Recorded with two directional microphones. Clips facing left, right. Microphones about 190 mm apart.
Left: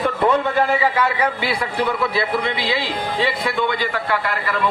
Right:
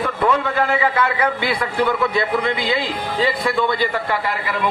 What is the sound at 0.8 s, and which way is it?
A man's voice, 10° left (ahead or behind).